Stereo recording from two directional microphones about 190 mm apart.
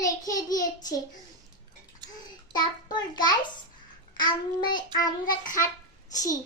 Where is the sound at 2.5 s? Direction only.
20° left (ahead or behind).